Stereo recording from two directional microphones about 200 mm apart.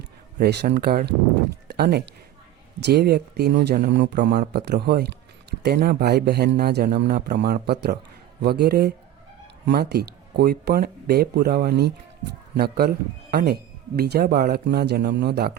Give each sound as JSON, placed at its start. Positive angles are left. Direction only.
{"t": 0.3, "sound": "a man's voice", "side_deg": -55}